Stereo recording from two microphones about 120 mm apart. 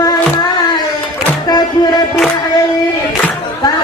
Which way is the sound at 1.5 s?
35° left (ahead or behind).